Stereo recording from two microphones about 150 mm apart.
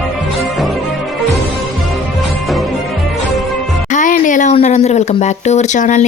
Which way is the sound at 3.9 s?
60° left (ahead or behind).